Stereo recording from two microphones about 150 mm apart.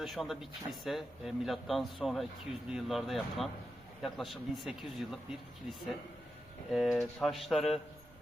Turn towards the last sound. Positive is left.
turn(degrees=0)  # may be behind; listen again after turning